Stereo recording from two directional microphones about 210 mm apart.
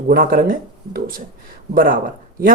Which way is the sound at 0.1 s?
45° right (ahead or behind).